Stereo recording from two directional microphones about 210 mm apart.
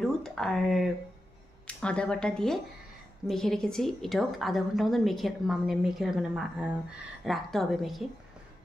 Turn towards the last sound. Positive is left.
turn(degrees=0)  # may be behind; listen again after turning